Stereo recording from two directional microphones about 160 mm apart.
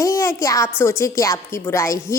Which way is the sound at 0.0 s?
20° left (ahead or behind).